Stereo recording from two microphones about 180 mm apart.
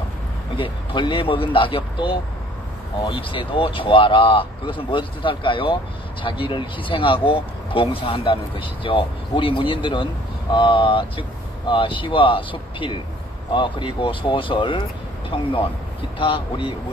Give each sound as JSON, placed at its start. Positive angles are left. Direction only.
{"t": 0.6, "sound": "speech", "side_deg": 30}